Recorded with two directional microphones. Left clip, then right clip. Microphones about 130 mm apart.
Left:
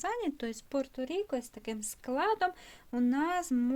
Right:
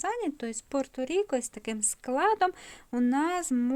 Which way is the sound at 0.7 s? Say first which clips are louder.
Right 5 dB; 60° right (ahead or behind).